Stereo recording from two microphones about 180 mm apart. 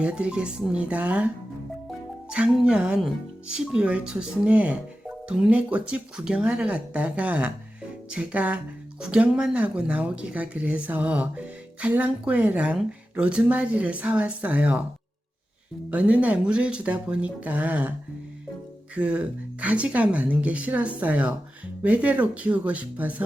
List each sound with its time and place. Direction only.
0.0 s speech: 5° right (ahead or behind)
2.3 s speech: 5° right (ahead or behind)
15.9 s speech: 5° right (ahead or behind)
18.9 s speech: 5° right (ahead or behind)